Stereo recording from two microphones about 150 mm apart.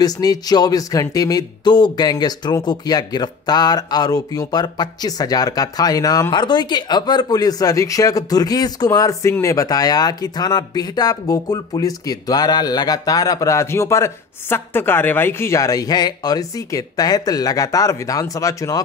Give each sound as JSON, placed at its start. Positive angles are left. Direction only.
{"t": 0.0, "sound": "speech", "side_deg": 25}